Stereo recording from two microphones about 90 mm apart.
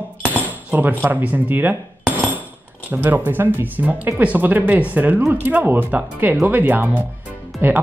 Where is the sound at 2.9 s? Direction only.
20° right (ahead or behind).